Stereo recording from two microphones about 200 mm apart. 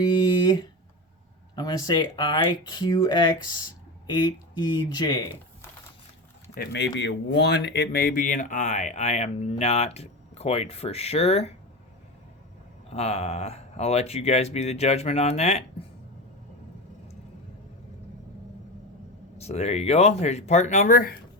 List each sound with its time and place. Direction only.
0.2 s a sound: 20° left (ahead or behind)
1.5 s speech: 20° left (ahead or behind)
6.5 s speech: 55° left (ahead or behind); by 11.5 s 30° left (ahead or behind)
12.9 s speech: 30° left (ahead or behind)
19.4 s speech: 30° left (ahead or behind)